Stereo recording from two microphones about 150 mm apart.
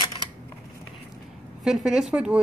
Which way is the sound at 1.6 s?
5° right (ahead or behind).